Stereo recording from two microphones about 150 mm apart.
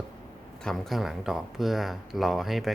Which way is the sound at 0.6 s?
Centre (ahead or behind).